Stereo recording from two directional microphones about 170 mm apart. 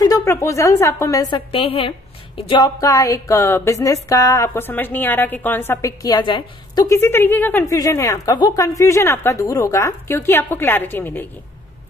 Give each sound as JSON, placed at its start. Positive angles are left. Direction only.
{"t": 0.0, "sound": "a woman's voice", "side_deg": 20}